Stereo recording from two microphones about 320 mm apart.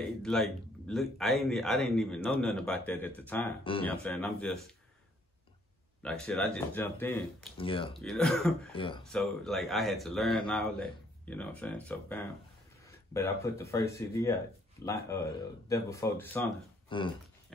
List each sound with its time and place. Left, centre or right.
0.2 s a man's voice: centre
6.0 s a man's voice: centre
7.5 s speech: centre
7.9 s a man's voice: centre
8.7 s speech: centre
9.1 s a man's voice: centre